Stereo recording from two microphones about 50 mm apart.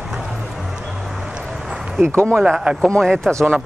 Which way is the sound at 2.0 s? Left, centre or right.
Right.